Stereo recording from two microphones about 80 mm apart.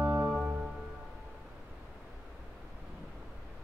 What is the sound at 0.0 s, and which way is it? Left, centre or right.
Music, right.